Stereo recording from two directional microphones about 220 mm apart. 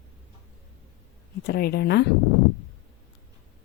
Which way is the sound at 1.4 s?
45° left (ahead or behind).